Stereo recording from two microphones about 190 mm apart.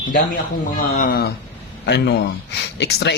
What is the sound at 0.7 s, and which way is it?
Speech, 50° left (ahead or behind).